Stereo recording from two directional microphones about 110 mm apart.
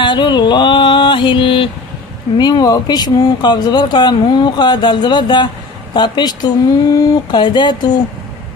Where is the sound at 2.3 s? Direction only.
40° left (ahead or behind).